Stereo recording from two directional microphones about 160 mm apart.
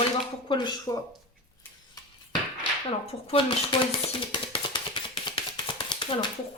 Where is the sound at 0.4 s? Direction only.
30° left (ahead or behind).